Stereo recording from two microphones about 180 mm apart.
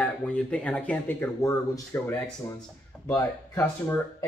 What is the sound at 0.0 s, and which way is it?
Speech, 5° left (ahead or behind).